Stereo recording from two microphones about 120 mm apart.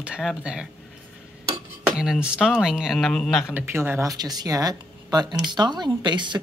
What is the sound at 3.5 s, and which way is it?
Speech, 15° right (ahead or behind).